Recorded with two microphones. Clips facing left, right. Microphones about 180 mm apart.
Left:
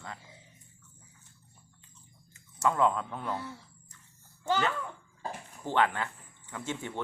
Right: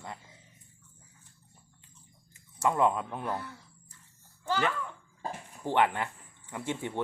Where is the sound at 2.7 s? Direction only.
15° right (ahead or behind).